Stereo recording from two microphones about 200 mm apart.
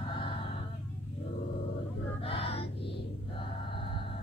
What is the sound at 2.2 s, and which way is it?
Music, 30° left (ahead or behind).